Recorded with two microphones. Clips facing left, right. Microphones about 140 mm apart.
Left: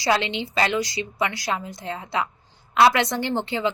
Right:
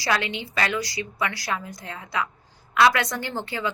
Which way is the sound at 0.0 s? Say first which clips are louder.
Left 3 dB; 25° left (ahead or behind).